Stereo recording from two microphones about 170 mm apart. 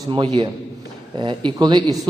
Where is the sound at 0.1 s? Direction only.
25° right (ahead or behind).